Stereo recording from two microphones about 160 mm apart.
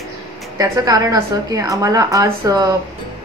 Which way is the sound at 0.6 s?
25° right (ahead or behind).